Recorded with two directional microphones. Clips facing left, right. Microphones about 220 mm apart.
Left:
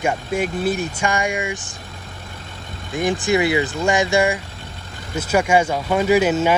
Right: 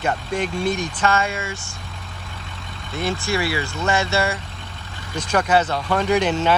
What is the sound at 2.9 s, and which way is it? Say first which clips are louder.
Speech: left 5 dB; 15° left (ahead or behind).